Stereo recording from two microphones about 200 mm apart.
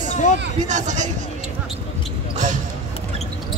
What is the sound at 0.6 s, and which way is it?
Speech, 35° right (ahead or behind).